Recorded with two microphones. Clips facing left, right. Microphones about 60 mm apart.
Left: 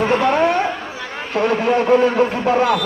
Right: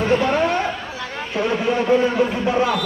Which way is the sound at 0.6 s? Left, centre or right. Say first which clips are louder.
Left 2 dB; centre.